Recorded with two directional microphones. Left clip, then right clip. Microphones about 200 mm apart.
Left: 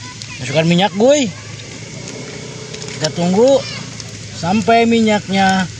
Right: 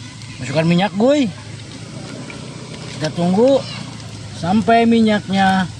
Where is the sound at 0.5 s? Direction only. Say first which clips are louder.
Left 3 dB; 20° left (ahead or behind).